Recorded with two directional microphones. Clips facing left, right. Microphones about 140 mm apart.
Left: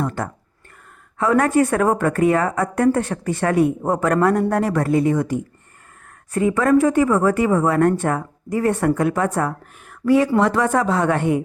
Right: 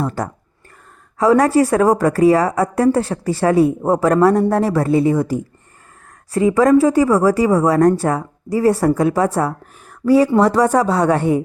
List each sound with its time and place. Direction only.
0.2 s speech: 35° right (ahead or behind)
6.7 s speech: 30° right (ahead or behind)